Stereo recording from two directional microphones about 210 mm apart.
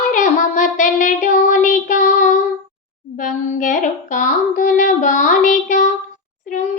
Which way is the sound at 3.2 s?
35° left (ahead or behind).